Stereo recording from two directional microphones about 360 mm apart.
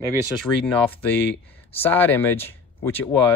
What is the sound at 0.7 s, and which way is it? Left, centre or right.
Speech, centre.